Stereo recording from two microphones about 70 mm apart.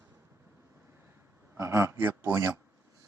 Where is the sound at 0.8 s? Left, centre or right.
Right.